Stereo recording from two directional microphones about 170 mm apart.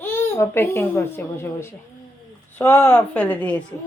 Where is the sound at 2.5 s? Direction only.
10° left (ahead or behind).